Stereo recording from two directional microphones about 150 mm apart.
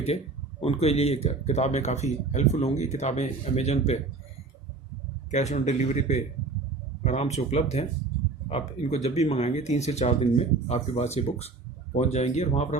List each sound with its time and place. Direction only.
0.6 s speech: 45° left (ahead or behind)
5.3 s speech: 50° left (ahead or behind)